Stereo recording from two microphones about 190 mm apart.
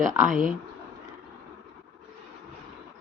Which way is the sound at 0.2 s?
40° right (ahead or behind).